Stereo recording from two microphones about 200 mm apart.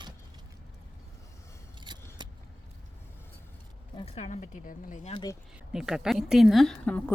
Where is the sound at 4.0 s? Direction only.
30° left (ahead or behind).